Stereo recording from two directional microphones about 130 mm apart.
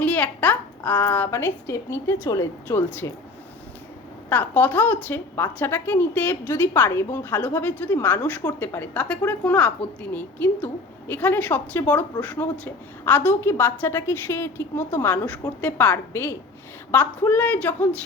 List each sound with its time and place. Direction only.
0.0 s a woman's voice: 10° left (ahead or behind); by 2.5 s 30° left (ahead or behind)
2.6 s a woman's voice: 15° left (ahead or behind)
4.3 s a woman's voice: 15° left (ahead or behind)